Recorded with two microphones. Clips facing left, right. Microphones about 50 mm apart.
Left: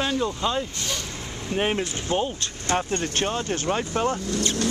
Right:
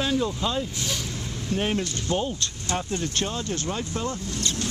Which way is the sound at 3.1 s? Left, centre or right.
Left.